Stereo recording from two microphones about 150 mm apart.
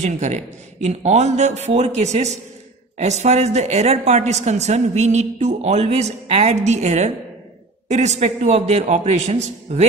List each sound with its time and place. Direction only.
0.0 s a woman's voice: 50° right (ahead or behind)